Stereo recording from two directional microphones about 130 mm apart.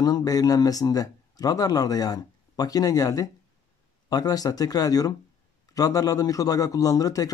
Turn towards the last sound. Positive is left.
turn(degrees=30)  # may be behind; listen again after turning